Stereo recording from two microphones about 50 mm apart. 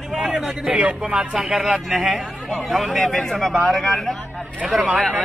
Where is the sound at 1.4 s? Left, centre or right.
Centre.